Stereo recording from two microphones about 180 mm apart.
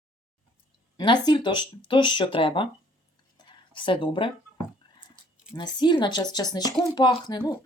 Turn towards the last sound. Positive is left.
turn(degrees=25)  # may be behind; listen again after turning